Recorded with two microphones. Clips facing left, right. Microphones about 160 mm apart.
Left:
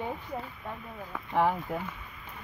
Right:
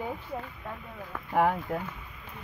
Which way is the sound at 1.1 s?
Centre (ahead or behind).